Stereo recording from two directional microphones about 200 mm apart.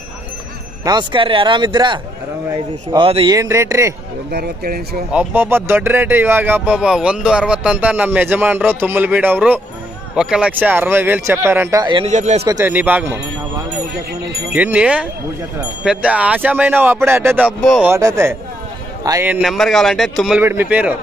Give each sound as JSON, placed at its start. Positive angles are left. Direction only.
{"t": 0.8, "sound": "speech", "side_deg": -25}
{"t": 4.3, "sound": "speech", "side_deg": -50}
{"t": 5.1, "sound": "speech", "side_deg": -10}
{"t": 12.1, "sound": "a man's voice", "side_deg": -35}
{"t": 12.4, "sound": "speech", "side_deg": -15}
{"t": 14.5, "sound": "speech", "side_deg": -5}
{"t": 17.6, "sound": "speech", "side_deg": 0}
{"t": 17.9, "sound": "speech", "side_deg": -15}
{"t": 19.4, "sound": "speech", "side_deg": 0}